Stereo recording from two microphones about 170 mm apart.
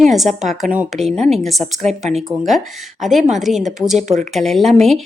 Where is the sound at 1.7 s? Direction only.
40° right (ahead or behind).